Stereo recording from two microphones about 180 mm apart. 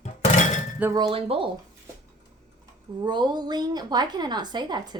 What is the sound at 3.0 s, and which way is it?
A woman's voice, 25° right (ahead or behind).